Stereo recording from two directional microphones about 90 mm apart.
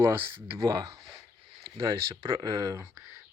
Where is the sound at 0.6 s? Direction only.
50° right (ahead or behind).